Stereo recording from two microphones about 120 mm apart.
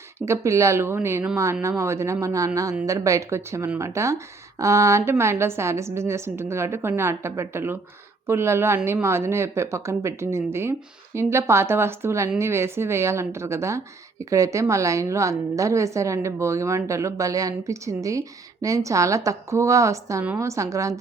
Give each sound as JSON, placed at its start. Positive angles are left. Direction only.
{"t": 0.3, "sound": "a woman's voice", "side_deg": -25}